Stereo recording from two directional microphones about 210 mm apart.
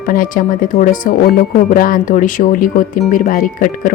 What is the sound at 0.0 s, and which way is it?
Speech, 40° left (ahead or behind).